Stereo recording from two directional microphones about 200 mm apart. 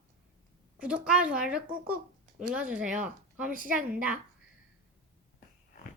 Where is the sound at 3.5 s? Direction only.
45° right (ahead or behind).